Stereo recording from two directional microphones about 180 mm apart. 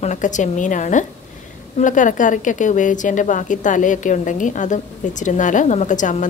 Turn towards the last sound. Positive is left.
turn(degrees=45)  # may be behind; listen again after turning